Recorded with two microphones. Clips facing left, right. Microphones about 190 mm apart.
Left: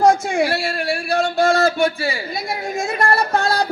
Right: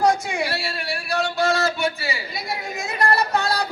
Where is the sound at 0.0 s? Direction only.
50° left (ahead or behind).